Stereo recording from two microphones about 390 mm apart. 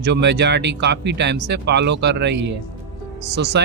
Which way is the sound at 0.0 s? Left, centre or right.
Right.